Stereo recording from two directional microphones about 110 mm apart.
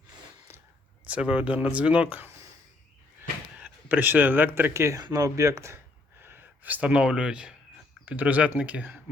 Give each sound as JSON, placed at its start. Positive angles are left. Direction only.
{"t": 1.0, "sound": "speech", "side_deg": -10}
{"t": 3.6, "sound": "speech", "side_deg": -15}